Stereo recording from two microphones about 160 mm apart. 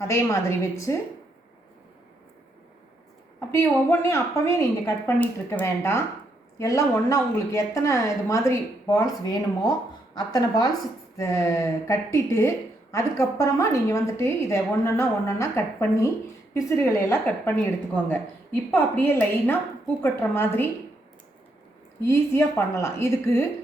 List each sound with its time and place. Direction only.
0.1 s a woman's voice: 20° left (ahead or behind)
3.5 s a woman's voice: 15° left (ahead or behind)
22.0 s speech: 15° left (ahead or behind)